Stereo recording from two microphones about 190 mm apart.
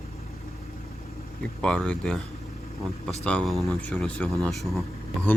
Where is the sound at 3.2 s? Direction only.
5° left (ahead or behind).